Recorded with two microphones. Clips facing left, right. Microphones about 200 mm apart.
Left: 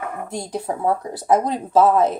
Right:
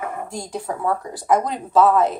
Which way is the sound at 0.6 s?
25° left (ahead or behind).